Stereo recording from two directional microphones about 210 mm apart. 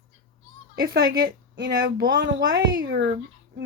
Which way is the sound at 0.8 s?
55° right (ahead or behind).